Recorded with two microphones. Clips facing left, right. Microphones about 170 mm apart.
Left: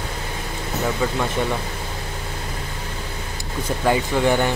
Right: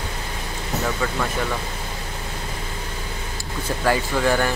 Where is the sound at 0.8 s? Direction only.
15° left (ahead or behind).